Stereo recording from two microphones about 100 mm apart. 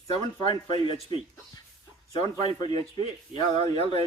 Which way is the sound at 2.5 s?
45° left (ahead or behind).